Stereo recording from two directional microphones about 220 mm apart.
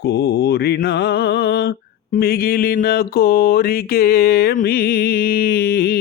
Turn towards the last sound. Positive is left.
turn(degrees=45)  # may be behind; listen again after turning